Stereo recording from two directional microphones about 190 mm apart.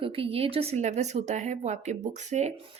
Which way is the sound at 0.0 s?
30° right (ahead or behind).